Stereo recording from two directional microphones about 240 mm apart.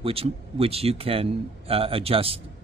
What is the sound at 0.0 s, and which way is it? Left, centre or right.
Speech, right.